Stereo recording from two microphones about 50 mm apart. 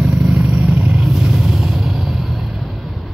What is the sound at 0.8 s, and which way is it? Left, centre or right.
Vehicle, right.